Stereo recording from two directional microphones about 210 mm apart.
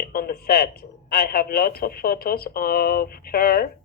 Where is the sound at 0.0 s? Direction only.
45° left (ahead or behind).